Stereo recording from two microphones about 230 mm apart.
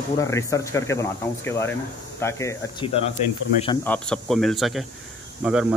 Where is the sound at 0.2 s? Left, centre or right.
Centre.